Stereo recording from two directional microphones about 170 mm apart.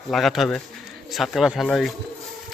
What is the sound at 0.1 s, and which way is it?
Speech, centre (ahead or behind).